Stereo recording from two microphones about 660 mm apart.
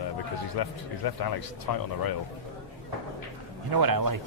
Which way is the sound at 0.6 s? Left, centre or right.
Left.